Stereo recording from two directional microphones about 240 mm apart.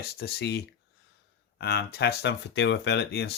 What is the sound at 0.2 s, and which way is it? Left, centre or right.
Speech, left.